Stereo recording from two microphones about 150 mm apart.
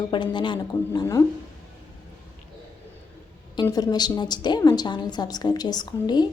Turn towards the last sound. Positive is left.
turn(degrees=30)  # may be behind; listen again after turning